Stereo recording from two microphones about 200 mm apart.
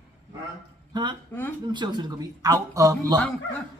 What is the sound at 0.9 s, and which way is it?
Speech, 20° right (ahead or behind).